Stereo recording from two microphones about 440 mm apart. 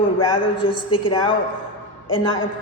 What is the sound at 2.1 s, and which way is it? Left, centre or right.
Speech, left.